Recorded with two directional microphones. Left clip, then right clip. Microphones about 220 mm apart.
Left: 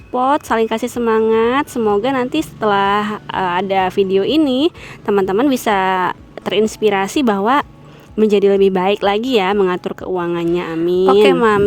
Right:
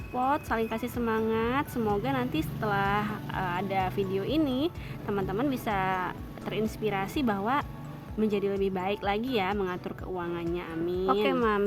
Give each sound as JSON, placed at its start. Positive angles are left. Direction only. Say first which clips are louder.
{"t": 0.1, "sound": "speech", "louder": "left 13 dB", "side_deg": 45}